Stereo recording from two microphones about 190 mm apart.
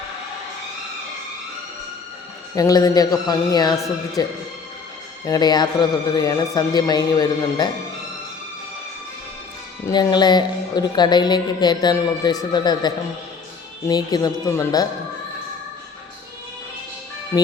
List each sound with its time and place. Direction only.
2.6 s speech: 20° left (ahead or behind)
9.8 s speech: 20° left (ahead or behind)